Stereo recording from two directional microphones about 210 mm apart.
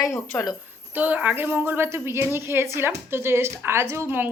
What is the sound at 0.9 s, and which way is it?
A woman's voice, 5° right (ahead or behind).